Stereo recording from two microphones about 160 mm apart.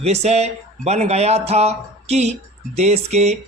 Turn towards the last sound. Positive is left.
turn(degrees=-45)  # may be behind; listen again after turning